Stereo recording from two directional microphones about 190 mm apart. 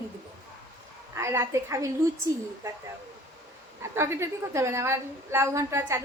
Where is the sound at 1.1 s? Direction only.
15° right (ahead or behind).